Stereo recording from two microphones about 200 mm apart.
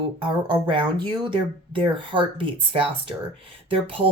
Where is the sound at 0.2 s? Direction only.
25° right (ahead or behind).